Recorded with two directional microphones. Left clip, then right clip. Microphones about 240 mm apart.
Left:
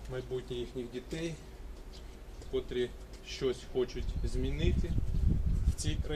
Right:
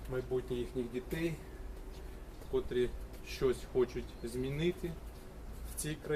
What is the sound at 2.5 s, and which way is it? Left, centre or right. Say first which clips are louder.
Speech: even; centre.